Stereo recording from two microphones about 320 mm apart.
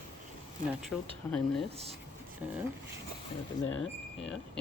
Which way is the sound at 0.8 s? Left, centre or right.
Centre.